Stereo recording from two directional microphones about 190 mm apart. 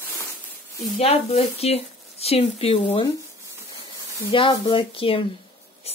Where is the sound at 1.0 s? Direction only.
30° left (ahead or behind).